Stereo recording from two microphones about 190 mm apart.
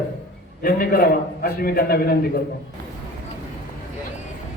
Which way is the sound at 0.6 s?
50° left (ahead or behind).